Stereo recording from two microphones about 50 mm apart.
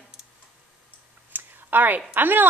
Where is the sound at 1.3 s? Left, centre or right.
Right.